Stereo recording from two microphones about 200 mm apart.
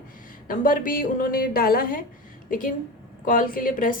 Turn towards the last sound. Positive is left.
turn(degrees=45)  # may be behind; listen again after turning